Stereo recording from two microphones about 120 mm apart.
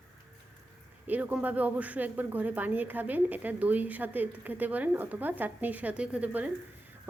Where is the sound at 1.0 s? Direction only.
15° right (ahead or behind).